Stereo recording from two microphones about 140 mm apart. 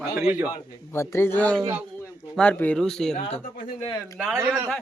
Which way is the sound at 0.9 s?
15° left (ahead or behind).